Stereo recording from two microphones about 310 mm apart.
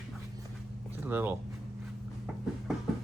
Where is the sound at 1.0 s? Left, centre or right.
Centre.